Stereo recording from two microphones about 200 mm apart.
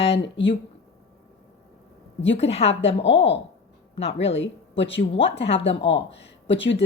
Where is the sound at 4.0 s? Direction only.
30° left (ahead or behind).